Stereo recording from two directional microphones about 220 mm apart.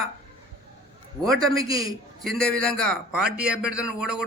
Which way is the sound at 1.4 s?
15° right (ahead or behind).